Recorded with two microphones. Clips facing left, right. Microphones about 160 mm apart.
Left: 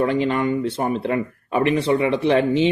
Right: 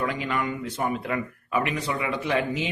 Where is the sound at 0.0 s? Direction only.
30° left (ahead or behind).